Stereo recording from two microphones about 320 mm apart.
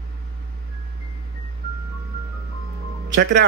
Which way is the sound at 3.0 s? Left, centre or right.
Right.